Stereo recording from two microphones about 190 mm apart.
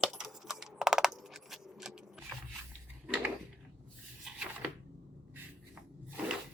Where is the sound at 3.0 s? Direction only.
5° right (ahead or behind).